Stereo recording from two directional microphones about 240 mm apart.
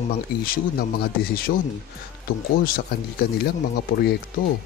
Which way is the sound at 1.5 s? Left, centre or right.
Left.